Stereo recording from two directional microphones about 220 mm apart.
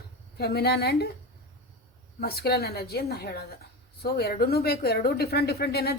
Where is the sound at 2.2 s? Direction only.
45° left (ahead or behind).